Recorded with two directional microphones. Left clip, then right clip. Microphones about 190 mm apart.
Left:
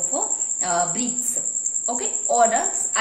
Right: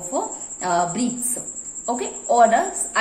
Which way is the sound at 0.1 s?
20° right (ahead or behind).